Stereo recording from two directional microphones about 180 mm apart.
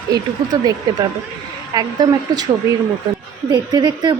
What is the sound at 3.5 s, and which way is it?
Speech, 25° right (ahead or behind).